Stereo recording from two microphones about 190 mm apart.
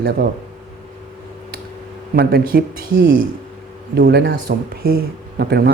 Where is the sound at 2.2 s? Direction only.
50° right (ahead or behind).